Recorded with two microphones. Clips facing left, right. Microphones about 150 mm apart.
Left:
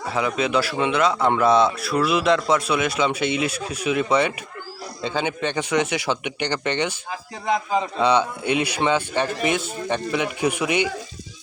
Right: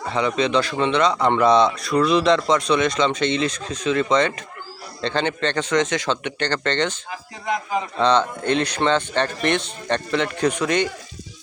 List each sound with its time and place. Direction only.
0.0 s a man's voice: 5° left (ahead or behind)
7.4 s a man's voice: 25° left (ahead or behind)
8.0 s a man's voice: 10° left (ahead or behind)